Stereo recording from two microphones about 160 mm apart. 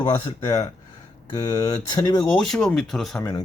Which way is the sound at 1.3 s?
25° left (ahead or behind).